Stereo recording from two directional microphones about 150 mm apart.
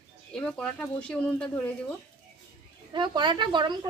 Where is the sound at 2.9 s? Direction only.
30° right (ahead or behind).